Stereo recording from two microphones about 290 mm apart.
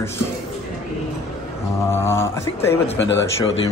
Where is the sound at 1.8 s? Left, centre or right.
Centre.